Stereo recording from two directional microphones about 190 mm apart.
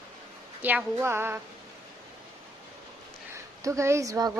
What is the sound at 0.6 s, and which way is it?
Speech, 10° right (ahead or behind).